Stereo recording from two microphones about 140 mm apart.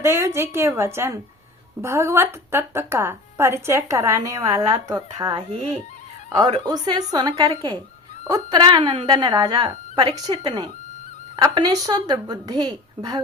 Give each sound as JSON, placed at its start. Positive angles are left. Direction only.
{"t": 0.0, "sound": "a woman's voice", "side_deg": -20}
{"t": 5.5, "sound": "speech", "side_deg": -45}
{"t": 6.3, "sound": "a woman's voice", "side_deg": -30}